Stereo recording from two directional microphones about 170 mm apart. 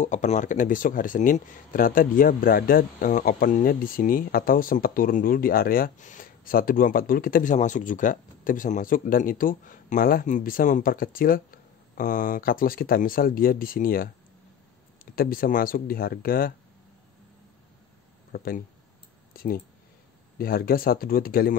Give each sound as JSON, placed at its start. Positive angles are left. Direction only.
{"t": 0.0, "sound": "speech", "side_deg": 45}
{"t": 15.1, "sound": "speech", "side_deg": 60}
{"t": 18.3, "sound": "speech", "side_deg": 60}